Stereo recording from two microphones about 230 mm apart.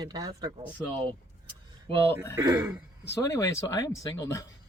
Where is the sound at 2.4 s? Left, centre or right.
Centre.